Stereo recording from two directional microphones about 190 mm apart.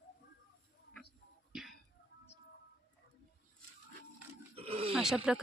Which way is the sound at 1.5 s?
5° right (ahead or behind).